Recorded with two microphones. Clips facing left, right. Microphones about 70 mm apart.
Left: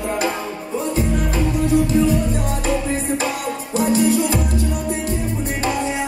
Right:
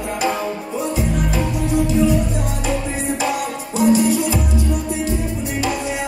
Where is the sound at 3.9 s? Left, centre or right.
Left.